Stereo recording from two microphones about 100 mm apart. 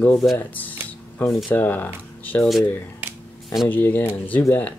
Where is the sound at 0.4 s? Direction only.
15° left (ahead or behind).